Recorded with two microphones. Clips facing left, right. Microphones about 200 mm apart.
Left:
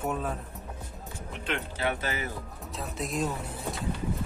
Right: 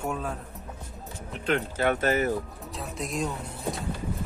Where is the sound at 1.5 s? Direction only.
50° right (ahead or behind).